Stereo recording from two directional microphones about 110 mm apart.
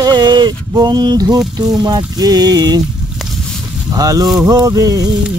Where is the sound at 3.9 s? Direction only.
35° right (ahead or behind).